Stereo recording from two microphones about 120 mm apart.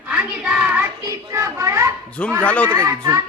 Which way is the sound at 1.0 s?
25° right (ahead or behind).